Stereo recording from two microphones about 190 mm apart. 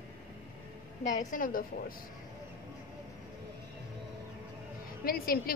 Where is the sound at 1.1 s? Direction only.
45° left (ahead or behind).